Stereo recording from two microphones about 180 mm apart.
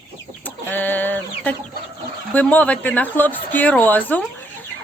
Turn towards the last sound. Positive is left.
turn(degrees=10)  # may be behind; listen again after turning